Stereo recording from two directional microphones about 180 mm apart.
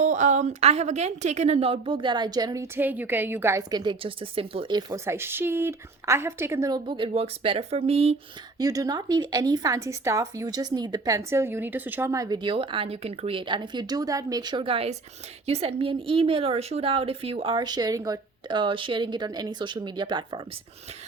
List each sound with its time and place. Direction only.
0.0 s a woman's voice: 40° right (ahead or behind)
8.5 s a woman's voice: 20° right (ahead or behind)